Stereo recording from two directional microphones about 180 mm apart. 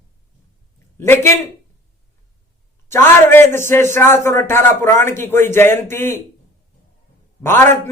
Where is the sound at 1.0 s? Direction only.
15° left (ahead or behind).